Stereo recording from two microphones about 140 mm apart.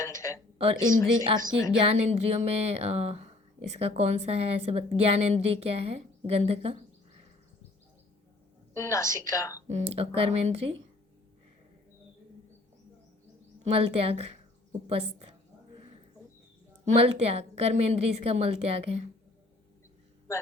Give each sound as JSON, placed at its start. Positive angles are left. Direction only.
{"t": 0.0, "sound": "a sound", "side_deg": 20}
{"t": 0.6, "sound": "speech", "side_deg": -40}
{"t": 1.9, "sound": "speech", "side_deg": -55}
{"t": 8.7, "sound": "a woman's voice", "side_deg": 20}
{"t": 9.6, "sound": "speech", "side_deg": -50}
{"t": 13.6, "sound": "speech", "side_deg": -45}
{"t": 16.8, "sound": "speech", "side_deg": -50}